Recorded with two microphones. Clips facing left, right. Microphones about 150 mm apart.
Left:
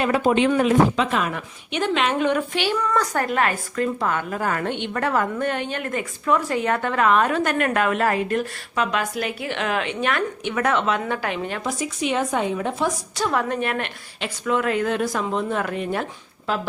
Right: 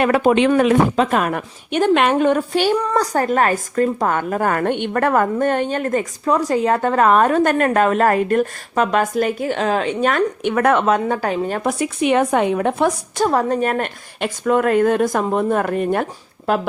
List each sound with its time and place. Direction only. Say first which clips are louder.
0.0 s speech: right 4 dB; 65° right (ahead or behind)
0.9 s a woman's voice: right 5 dB; 45° right (ahead or behind)
11.6 s a woman's voice: right 6 dB; 60° right (ahead or behind)
13.2 s a woman's voice: right 6 dB; 35° right (ahead or behind); by 16.6 s 50° right (ahead or behind)